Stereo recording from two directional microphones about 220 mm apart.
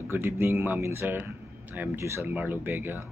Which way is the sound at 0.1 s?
10° right (ahead or behind).